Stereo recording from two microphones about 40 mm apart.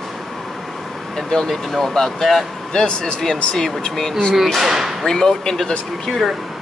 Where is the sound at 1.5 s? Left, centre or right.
Centre.